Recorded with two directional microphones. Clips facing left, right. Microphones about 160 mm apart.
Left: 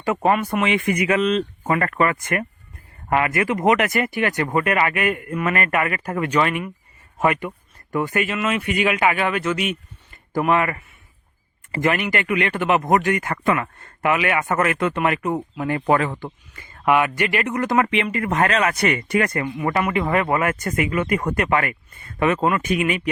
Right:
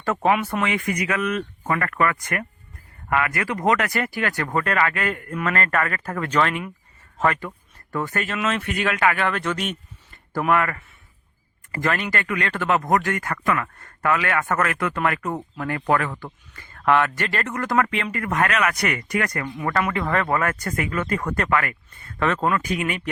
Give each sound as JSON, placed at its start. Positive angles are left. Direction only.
{"t": 0.0, "sound": "speech", "side_deg": 10}
{"t": 10.3, "sound": "speech", "side_deg": 20}
{"t": 22.2, "sound": "speech", "side_deg": 15}